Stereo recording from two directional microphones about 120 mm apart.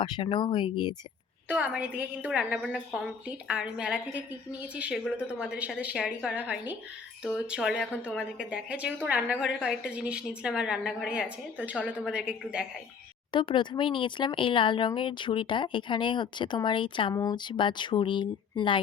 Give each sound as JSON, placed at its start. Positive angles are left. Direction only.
{"t": 0.0, "sound": "speech", "side_deg": 45}
{"t": 1.5, "sound": "a woman's voice", "side_deg": -10}
{"t": 13.3, "sound": "speech", "side_deg": 40}